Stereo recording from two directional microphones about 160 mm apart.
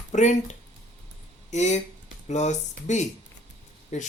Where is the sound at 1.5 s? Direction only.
45° left (ahead or behind).